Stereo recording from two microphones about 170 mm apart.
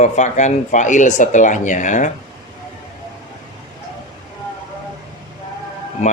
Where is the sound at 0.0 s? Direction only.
45° left (ahead or behind).